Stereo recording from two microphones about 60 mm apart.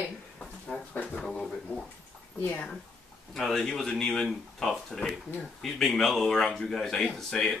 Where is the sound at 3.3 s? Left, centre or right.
Centre.